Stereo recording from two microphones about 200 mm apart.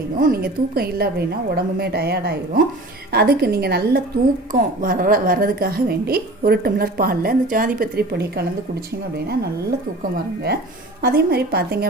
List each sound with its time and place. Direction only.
0.2 s a woman's voice: 45° right (ahead or behind)